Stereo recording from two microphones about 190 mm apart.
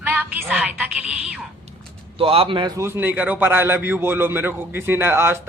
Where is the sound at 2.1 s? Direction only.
30° right (ahead or behind).